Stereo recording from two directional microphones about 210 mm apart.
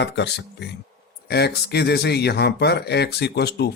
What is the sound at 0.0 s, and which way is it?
Speech, 55° left (ahead or behind).